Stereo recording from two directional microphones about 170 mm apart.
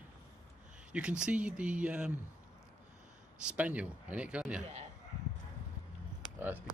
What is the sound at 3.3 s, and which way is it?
Speech, 5° right (ahead or behind).